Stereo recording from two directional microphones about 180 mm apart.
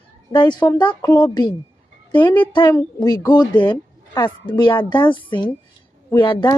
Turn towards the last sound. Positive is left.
turn(degrees=25)  # may be behind; listen again after turning